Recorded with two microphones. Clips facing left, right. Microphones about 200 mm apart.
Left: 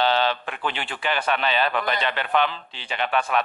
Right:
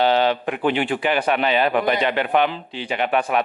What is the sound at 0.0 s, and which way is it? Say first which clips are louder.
A man's voice: right 4 dB; 15° right (ahead or behind).